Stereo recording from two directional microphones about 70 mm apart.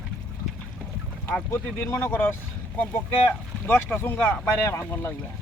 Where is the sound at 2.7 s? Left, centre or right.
Left.